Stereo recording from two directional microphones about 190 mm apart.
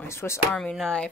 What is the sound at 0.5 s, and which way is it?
Speech, 5° left (ahead or behind).